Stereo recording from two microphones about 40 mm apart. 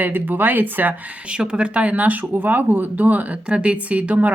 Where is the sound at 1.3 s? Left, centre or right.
Right.